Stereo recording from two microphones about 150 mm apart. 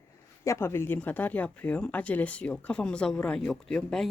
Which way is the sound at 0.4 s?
20° left (ahead or behind).